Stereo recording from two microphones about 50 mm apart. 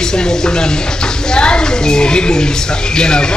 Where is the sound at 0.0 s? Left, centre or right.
Centre.